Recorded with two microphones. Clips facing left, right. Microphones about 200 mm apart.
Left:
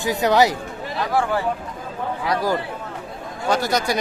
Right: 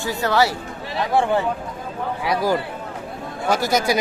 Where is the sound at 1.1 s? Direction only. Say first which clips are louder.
Right 3 dB; 25° right (ahead or behind).